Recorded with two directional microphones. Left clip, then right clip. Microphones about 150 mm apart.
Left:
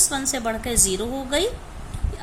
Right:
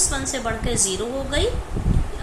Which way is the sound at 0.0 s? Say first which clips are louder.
Left 1 dB; 55° left (ahead or behind).